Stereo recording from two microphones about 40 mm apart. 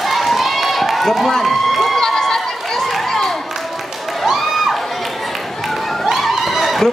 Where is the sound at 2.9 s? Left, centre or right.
Centre.